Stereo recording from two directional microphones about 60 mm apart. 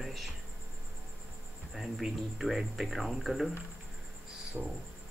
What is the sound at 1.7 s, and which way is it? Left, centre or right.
Speech, centre.